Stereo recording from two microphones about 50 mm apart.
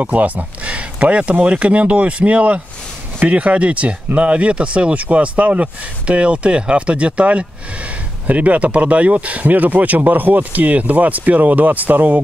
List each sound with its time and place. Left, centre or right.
0.0 s speech: right